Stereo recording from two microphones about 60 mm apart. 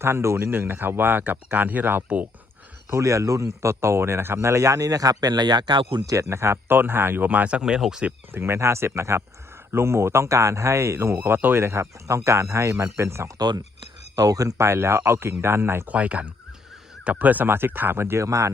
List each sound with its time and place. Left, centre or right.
0.0 s speech: right
2.9 s speech: right
6.1 s speech: right
6.7 s speech: right; by 8.0 s centre
8.3 s speech: right
14.2 s speech: right
14.6 s speech: right
15.9 s speech: right
18.3 s speech: right